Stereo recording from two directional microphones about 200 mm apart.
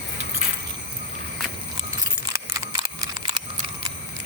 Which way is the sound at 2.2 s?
15° right (ahead or behind).